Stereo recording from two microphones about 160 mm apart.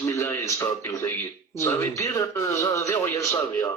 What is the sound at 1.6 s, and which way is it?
A man's voice, 20° left (ahead or behind).